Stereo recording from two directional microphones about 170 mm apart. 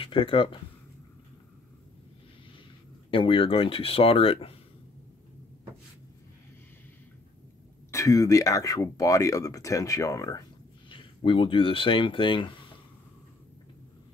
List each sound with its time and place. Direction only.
0.0 s speech: 30° left (ahead or behind)
3.1 s speech: 30° left (ahead or behind)
7.9 s speech: 20° left (ahead or behind)
10.9 s speech: 30° left (ahead or behind)